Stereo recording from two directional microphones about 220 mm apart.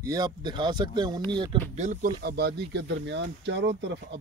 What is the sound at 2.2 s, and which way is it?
Speech, 45° right (ahead or behind).